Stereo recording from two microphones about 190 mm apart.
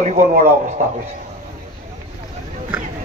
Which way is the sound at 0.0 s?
45° right (ahead or behind).